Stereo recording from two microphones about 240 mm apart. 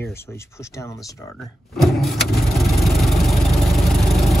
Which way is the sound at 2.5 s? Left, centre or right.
Centre.